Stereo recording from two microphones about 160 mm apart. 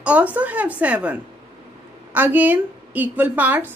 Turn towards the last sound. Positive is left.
turn(degrees=-10)  # may be behind; listen again after turning